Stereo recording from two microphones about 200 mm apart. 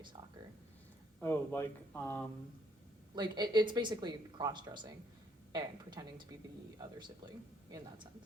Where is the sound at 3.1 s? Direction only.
20° right (ahead or behind).